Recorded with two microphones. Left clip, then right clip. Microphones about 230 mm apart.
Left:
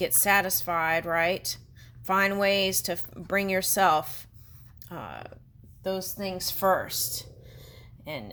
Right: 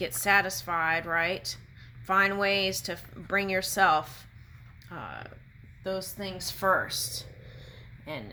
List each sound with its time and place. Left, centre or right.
0.2 s speech: left